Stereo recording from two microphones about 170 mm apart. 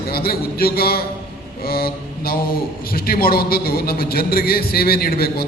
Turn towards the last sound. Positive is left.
turn(degrees=65)  # may be behind; listen again after turning